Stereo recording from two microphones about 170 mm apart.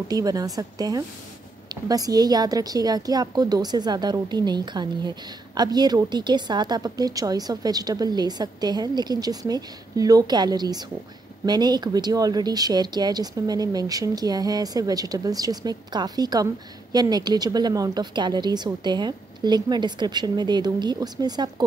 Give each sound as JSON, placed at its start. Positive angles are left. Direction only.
{"t": 0.1, "sound": "a woman's voice", "side_deg": -20}